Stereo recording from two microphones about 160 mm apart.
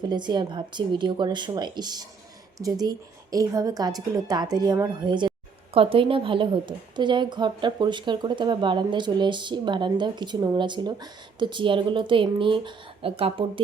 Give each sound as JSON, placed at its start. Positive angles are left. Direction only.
{"t": 0.1, "sound": "a woman's voice", "side_deg": -30}